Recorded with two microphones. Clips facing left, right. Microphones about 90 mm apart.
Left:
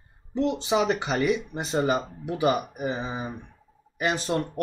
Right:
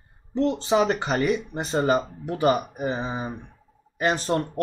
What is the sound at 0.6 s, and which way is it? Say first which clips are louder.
Speech: right 2 dB; 35° right (ahead or behind).